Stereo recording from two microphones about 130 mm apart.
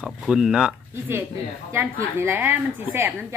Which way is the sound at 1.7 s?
20° right (ahead or behind).